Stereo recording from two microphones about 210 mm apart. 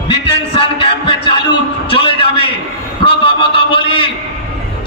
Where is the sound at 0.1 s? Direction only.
25° left (ahead or behind).